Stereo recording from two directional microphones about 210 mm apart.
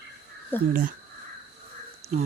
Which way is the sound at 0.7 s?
40° right (ahead or behind).